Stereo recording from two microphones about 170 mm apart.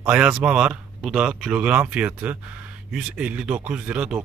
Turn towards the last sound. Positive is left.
turn(degrees=-5)  # may be behind; listen again after turning